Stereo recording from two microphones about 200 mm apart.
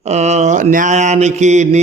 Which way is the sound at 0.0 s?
35° right (ahead or behind).